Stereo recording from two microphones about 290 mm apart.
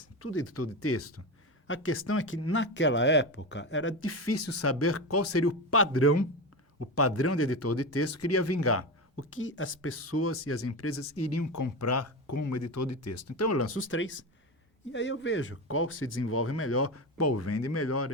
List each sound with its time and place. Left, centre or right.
0.2 s speech: left